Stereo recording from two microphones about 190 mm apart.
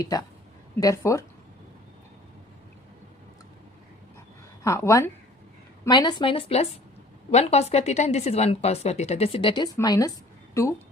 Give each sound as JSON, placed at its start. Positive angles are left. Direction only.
{"t": 0.0, "sound": "a woman's voice", "side_deg": 20}
{"t": 4.6, "sound": "a woman's voice", "side_deg": 15}